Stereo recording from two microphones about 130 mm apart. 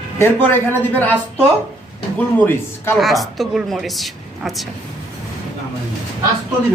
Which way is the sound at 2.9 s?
Centre (ahead or behind).